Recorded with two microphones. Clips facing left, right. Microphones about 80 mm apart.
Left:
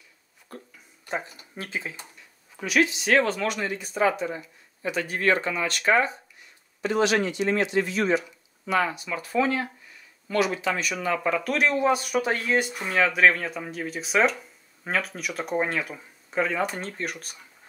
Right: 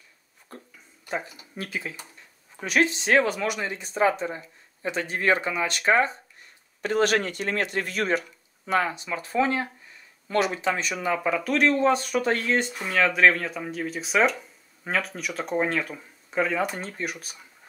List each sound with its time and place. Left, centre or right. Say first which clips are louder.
0.5 s speech: left 2 dB; right
1.6 s speech: even; centre
2.6 s speech: even; right
3.1 s speech: even; centre
3.7 s speech: right 2 dB; right
5.3 s speech: right 1 dB; centre
6.8 s speech: even; right
8.7 s speech: even; right
11.0 s speech: even; centre